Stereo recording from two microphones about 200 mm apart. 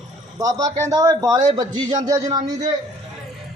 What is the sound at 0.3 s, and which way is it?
A man's voice, 15° right (ahead or behind).